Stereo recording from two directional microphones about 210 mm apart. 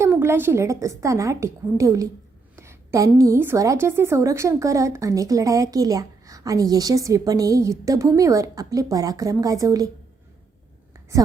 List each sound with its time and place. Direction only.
0.0 s a woman's voice: 10° right (ahead or behind)